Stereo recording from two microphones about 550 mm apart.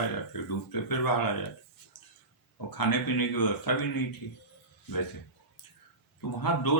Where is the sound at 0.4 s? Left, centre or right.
Left.